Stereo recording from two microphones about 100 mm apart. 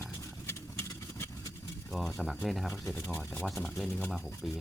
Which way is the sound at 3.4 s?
Centre (ahead or behind).